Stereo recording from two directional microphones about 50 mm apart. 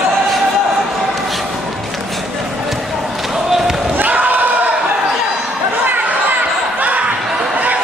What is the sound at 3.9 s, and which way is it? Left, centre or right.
Basketball bounce, right.